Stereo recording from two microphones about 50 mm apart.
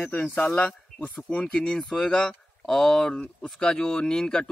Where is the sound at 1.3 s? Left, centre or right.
Centre.